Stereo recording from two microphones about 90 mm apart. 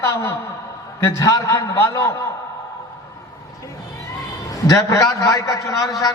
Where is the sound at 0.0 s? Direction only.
30° left (ahead or behind).